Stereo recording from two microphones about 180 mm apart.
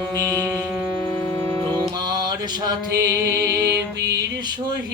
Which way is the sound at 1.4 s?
15° left (ahead or behind).